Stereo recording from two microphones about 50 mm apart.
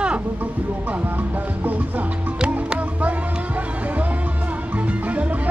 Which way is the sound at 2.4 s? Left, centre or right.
Right.